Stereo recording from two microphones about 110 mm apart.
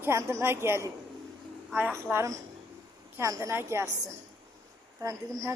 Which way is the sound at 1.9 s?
25° right (ahead or behind).